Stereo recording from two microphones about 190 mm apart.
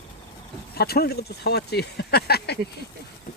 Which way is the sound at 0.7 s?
55° left (ahead or behind).